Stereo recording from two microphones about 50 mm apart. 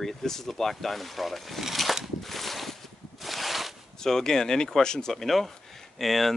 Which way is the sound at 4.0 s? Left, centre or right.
Centre.